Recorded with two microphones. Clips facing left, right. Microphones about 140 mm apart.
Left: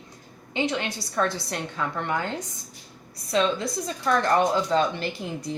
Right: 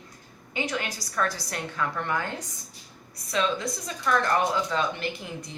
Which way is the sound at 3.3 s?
30° left (ahead or behind).